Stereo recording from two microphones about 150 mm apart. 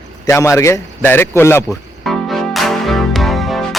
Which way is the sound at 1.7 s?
Centre (ahead or behind).